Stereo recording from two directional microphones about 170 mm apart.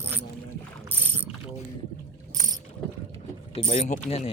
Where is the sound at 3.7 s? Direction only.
45° left (ahead or behind).